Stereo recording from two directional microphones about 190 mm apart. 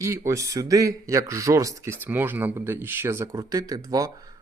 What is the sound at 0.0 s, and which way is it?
Speech, 15° right (ahead or behind).